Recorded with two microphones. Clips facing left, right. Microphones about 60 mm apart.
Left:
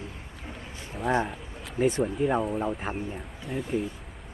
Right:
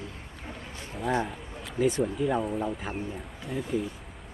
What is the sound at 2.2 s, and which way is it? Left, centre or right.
Speech, centre.